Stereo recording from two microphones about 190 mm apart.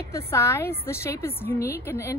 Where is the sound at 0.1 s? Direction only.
15° left (ahead or behind).